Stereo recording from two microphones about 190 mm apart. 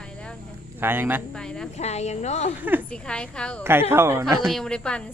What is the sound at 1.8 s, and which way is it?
Speech, 35° left (ahead or behind).